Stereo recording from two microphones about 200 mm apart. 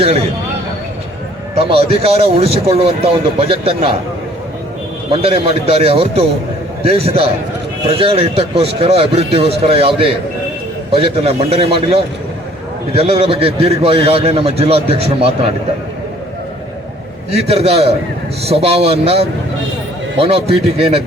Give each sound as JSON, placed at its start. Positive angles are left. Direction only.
{"t": 1.5, "sound": "a man's voice", "side_deg": -30}
{"t": 5.1, "sound": "a man's voice", "side_deg": -30}
{"t": 17.3, "sound": "a man's voice", "side_deg": -30}